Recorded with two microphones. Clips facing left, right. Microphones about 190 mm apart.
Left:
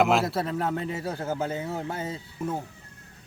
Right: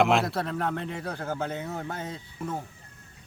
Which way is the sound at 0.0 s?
Centre (ahead or behind).